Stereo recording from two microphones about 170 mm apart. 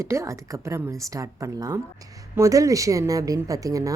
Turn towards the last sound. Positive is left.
turn(degrees=-20)  # may be behind; listen again after turning